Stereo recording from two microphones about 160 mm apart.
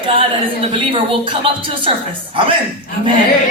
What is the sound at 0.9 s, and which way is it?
Speech, 35° right (ahead or behind).